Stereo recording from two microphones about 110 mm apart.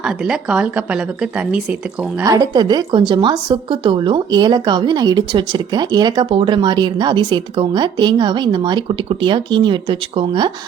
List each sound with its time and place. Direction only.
0.0 s speech: 5° right (ahead or behind)
2.2 s a woman's voice: 35° right (ahead or behind); by 10.5 s 50° right (ahead or behind)